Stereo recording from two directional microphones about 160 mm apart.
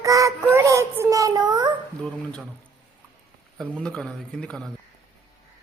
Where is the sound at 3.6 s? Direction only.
5° left (ahead or behind).